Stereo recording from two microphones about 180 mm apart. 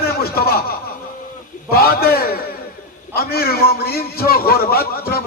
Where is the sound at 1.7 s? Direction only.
55° left (ahead or behind).